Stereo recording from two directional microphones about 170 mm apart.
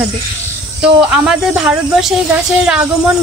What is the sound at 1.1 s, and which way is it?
Speech, 5° right (ahead or behind).